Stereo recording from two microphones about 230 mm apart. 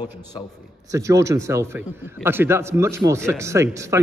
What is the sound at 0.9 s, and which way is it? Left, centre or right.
A man's voice, centre.